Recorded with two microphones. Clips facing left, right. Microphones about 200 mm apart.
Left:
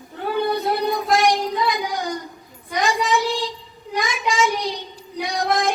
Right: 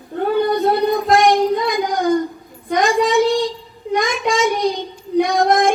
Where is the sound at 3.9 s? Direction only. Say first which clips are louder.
Right 4 dB; 50° right (ahead or behind).